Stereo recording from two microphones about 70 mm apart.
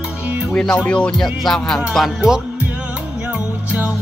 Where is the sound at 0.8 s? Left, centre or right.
Centre.